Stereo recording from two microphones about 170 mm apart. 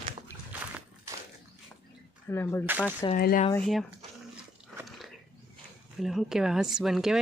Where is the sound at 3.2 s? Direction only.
60° left (ahead or behind).